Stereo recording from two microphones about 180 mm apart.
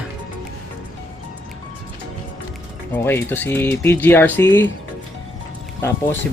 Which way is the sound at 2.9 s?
10° left (ahead or behind).